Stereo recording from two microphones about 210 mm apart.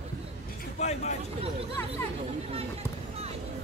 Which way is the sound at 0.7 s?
30° left (ahead or behind).